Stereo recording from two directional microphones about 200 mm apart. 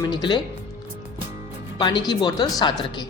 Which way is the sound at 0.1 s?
20° left (ahead or behind).